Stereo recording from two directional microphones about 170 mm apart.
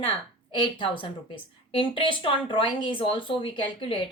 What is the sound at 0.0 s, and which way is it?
A woman's voice, 30° left (ahead or behind).